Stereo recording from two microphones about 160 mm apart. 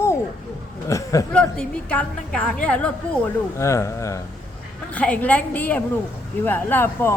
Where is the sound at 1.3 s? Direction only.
5° left (ahead or behind).